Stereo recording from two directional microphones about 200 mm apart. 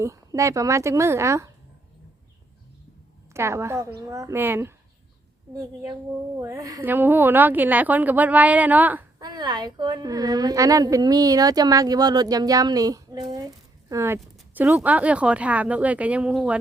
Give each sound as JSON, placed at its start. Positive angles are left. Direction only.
{"t": 0.0, "sound": "a woman's voice", "side_deg": -15}
{"t": 3.3, "sound": "a woman's voice", "side_deg": -15}
{"t": 9.2, "sound": "a woman's voice", "side_deg": -20}